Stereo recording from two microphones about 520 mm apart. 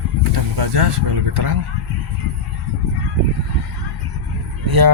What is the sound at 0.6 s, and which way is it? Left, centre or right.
Mantra, right.